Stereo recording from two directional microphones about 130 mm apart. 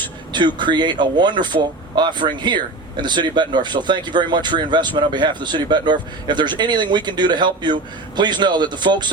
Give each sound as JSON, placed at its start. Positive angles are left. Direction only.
{"t": 0.3, "sound": "a man's voice", "side_deg": -35}